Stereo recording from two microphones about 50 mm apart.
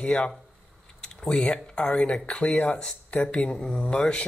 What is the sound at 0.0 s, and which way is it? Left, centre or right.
Speech, left.